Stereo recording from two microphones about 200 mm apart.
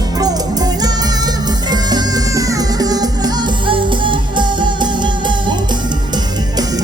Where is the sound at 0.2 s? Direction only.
20° right (ahead or behind).